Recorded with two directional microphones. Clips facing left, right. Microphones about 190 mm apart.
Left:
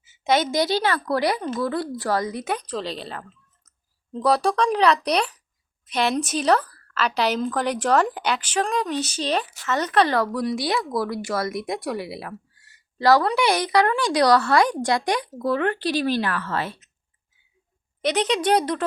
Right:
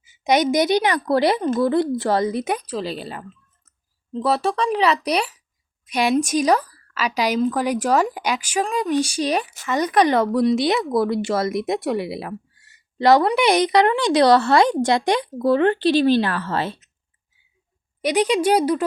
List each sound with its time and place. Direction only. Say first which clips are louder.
0.0 s a woman's voice: right 3 dB; 15° right (ahead or behind)
2.5 s a woman's voice: right 3 dB; 10° right (ahead or behind); by 16.8 s 30° right (ahead or behind)
18.0 s speech: right 3 dB; 10° right (ahead or behind)